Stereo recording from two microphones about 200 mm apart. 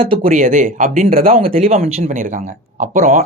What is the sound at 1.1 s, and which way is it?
Speech, 30° right (ahead or behind).